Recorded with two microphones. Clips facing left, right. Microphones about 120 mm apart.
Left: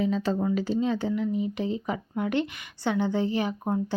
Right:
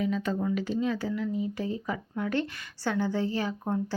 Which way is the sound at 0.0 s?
30° left (ahead or behind).